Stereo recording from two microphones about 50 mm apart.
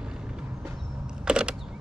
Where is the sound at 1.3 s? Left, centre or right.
Centre.